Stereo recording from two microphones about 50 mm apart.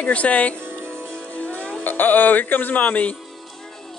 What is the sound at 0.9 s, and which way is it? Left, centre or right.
Music, left.